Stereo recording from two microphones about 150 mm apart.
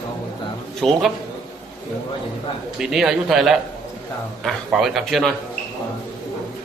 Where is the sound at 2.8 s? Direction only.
5° right (ahead or behind).